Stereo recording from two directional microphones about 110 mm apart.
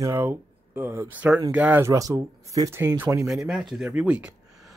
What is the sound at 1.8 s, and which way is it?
Speech, 30° right (ahead or behind).